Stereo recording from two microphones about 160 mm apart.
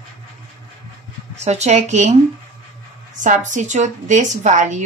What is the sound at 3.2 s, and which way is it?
A woman's voice, 50° right (ahead or behind).